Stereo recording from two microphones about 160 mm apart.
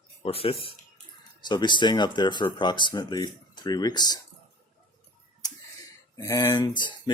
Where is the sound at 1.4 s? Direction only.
25° left (ahead or behind).